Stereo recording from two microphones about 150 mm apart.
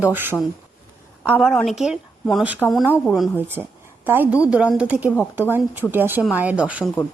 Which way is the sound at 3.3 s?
15° right (ahead or behind).